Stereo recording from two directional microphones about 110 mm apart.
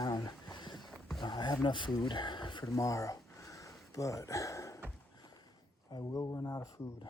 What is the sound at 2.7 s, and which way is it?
Speech, 30° left (ahead or behind).